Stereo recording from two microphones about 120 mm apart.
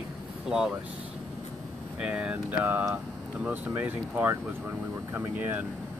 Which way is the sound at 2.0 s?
10° right (ahead or behind).